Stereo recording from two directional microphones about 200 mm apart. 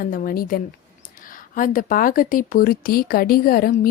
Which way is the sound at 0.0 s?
45° left (ahead or behind).